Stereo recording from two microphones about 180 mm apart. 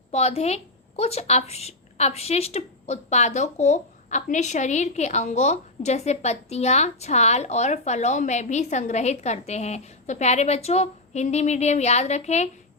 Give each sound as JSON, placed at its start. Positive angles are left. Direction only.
{"t": 0.1, "sound": "a woman's voice", "side_deg": 35}